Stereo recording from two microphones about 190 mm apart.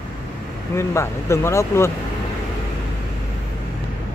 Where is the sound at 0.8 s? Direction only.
15° left (ahead or behind).